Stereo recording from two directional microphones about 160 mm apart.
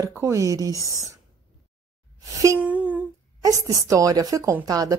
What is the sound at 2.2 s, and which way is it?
Music, 20° right (ahead or behind).